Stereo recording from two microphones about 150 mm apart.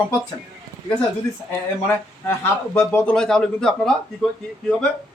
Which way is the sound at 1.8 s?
15° left (ahead or behind).